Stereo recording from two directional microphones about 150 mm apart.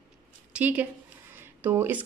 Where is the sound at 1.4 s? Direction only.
15° right (ahead or behind).